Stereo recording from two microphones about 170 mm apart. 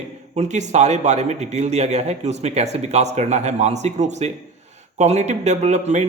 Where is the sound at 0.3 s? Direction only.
45° right (ahead or behind).